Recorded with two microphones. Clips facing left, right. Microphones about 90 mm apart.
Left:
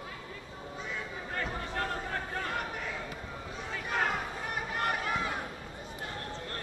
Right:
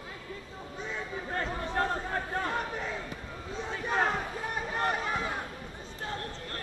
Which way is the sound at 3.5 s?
25° right (ahead or behind).